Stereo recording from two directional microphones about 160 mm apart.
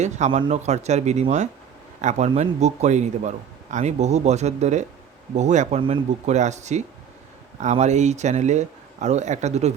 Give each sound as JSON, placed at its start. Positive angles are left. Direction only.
{"t": 0.4, "sound": "a man's voice", "side_deg": -45}